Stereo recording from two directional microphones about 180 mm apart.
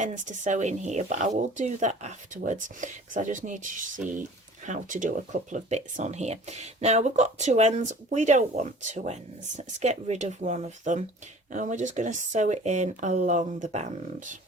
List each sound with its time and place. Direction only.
0.0 s speech: 45° right (ahead or behind)